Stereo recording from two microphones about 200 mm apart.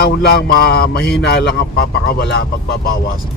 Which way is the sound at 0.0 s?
55° left (ahead or behind).